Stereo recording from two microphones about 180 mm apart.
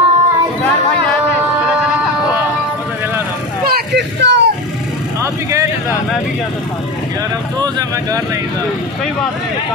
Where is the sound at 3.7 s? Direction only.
65° right (ahead or behind).